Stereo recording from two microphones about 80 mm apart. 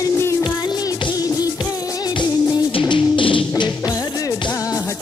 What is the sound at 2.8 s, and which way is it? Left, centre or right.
Music, left.